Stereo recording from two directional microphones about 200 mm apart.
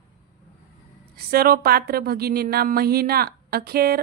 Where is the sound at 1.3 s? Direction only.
50° right (ahead or behind).